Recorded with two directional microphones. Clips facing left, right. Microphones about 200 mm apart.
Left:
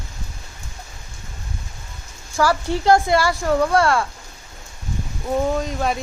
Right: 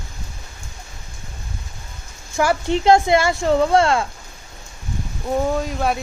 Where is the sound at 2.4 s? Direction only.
20° right (ahead or behind).